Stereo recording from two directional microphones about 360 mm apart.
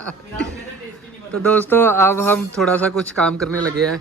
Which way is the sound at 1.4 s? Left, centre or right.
Centre.